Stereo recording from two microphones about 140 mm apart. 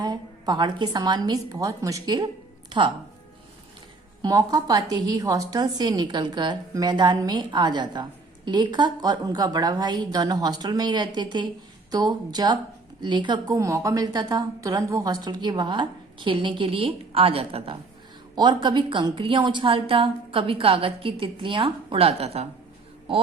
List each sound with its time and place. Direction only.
0.0 s a woman's voice: 30° right (ahead or behind)
4.2 s a woman's voice: 25° right (ahead or behind)